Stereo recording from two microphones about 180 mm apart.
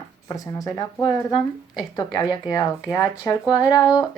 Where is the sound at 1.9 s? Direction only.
20° left (ahead or behind).